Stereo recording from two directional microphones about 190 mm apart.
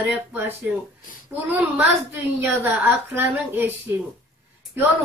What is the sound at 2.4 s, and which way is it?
Speech, 10° right (ahead or behind).